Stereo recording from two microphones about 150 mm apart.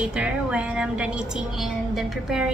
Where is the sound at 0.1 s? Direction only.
5° right (ahead or behind).